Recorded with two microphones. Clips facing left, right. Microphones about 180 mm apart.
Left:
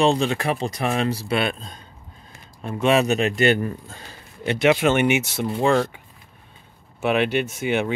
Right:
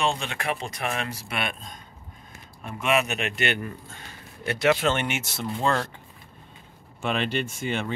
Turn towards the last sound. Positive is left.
turn(degrees=10)  # may be behind; listen again after turning